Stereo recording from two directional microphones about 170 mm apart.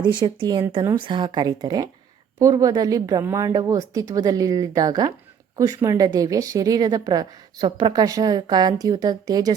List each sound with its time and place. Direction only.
0.0 s a woman's voice: 25° right (ahead or behind)